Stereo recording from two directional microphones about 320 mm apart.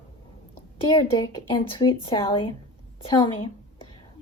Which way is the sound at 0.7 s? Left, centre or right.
Centre.